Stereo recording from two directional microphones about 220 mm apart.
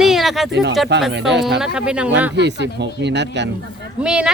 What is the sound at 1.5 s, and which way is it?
Speech, 5° right (ahead or behind).